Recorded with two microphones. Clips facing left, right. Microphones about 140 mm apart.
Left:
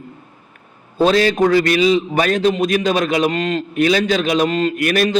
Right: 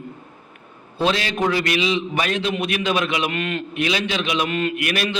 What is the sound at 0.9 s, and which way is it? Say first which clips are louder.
A man's voice: left 8 dB; 40° left (ahead or behind).